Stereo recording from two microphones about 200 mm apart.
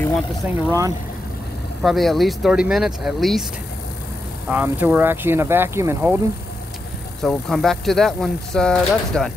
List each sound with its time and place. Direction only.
0.7 s speech: 15° right (ahead or behind)
1.8 s speech: centre (ahead or behind)
4.5 s speech: 10° right (ahead or behind)
7.2 s speech: centre (ahead or behind)